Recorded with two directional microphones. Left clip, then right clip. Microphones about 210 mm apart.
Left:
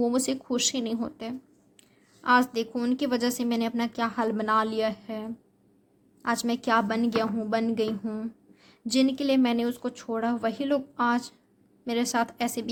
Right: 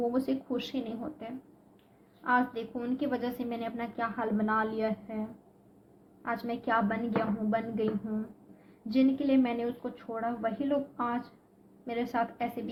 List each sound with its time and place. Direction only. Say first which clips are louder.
0.1 s a woman's voice: left 4 dB; 60° left (ahead or behind)
6.2 s a woman's voice: left 5 dB; 55° left (ahead or behind)